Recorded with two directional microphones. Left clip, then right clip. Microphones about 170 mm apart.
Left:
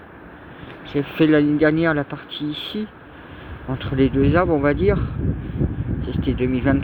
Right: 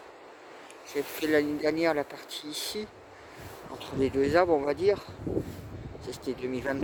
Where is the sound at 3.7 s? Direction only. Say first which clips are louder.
Left 8 dB; 20° right (ahead or behind).